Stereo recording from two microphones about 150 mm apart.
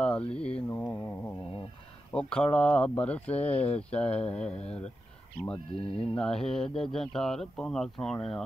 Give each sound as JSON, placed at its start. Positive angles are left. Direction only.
{"t": 0.3, "sound": "speech", "side_deg": 5}
{"t": 2.1, "sound": "speech", "side_deg": 5}
{"t": 4.6, "sound": "speech", "side_deg": 45}
{"t": 6.1, "sound": "speech", "side_deg": 5}